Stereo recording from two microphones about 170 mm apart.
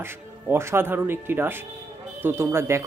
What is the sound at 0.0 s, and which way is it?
Speech, 15° right (ahead or behind).